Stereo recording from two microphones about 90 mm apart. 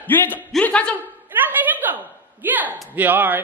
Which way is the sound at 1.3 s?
20° right (ahead or behind).